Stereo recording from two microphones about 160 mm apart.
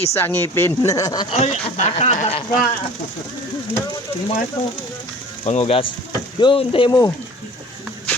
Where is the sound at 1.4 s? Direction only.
45° left (ahead or behind).